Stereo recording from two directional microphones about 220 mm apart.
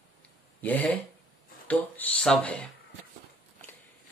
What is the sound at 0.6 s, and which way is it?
Speech, 5° left (ahead or behind).